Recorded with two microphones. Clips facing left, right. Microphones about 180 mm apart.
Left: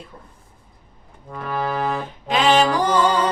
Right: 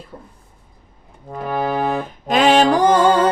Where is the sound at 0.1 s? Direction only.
25° right (ahead or behind).